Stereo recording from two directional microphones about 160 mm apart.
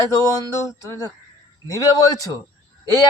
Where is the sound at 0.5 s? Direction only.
20° left (ahead or behind).